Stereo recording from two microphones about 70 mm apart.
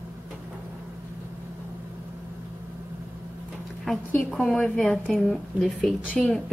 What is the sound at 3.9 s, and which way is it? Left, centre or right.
A woman's voice, centre.